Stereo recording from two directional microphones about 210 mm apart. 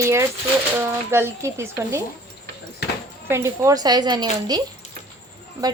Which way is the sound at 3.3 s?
15° right (ahead or behind).